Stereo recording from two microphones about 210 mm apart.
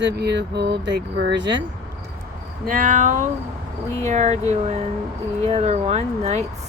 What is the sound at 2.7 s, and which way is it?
Speech, 40° right (ahead or behind).